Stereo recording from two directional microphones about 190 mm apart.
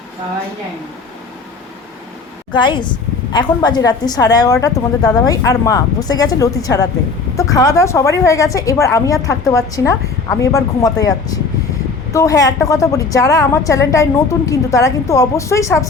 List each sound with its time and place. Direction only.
2.5 s a woman's voice: 25° left (ahead or behind)